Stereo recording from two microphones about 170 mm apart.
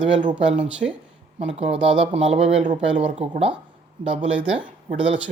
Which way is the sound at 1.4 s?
35° right (ahead or behind).